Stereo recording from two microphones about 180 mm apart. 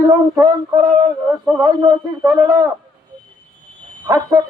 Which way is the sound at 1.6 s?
25° right (ahead or behind).